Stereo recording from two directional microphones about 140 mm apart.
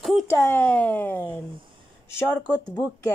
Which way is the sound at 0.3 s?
20° left (ahead or behind).